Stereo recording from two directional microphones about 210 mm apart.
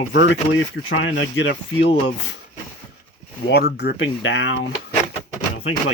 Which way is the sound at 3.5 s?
50° left (ahead or behind).